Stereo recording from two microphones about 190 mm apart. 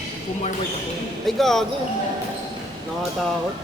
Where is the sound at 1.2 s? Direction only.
Centre (ahead or behind).